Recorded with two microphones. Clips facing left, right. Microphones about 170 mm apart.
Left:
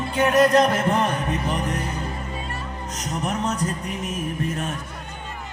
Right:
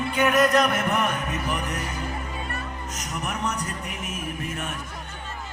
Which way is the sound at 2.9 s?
30° left (ahead or behind).